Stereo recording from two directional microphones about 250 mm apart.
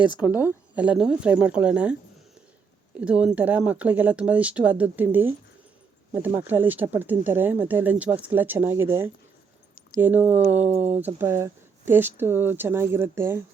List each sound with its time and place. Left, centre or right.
0.2 s speech: centre
3.0 s speech: centre